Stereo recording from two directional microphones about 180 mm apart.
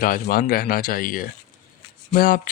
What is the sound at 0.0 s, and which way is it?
Speech, 50° left (ahead or behind).